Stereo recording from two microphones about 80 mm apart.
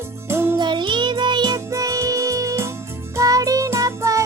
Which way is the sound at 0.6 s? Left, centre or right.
Right.